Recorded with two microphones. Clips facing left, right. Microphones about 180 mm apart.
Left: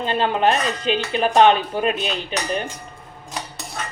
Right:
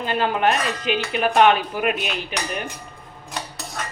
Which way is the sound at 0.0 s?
25° left (ahead or behind).